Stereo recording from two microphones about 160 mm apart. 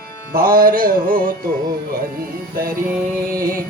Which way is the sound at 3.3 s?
65° right (ahead or behind).